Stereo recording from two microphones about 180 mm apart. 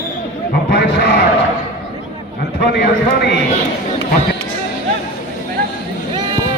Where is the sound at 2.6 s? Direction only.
65° left (ahead or behind).